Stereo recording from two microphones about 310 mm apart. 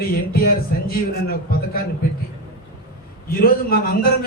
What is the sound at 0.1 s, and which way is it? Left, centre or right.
A man's voice, left.